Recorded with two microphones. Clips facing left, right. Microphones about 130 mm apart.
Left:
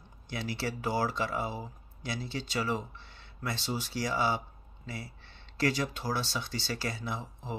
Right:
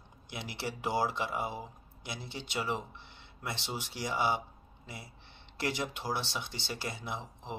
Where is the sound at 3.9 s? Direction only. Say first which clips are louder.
Left 1 dB; 20° right (ahead or behind).